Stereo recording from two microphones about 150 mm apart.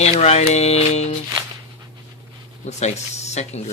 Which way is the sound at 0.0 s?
45° left (ahead or behind).